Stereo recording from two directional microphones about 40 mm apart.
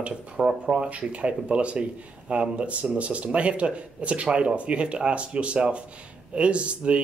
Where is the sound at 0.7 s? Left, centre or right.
Right.